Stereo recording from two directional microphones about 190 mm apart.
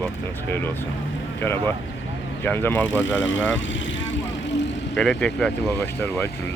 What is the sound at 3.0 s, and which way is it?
Vehicle, 75° left (ahead or behind).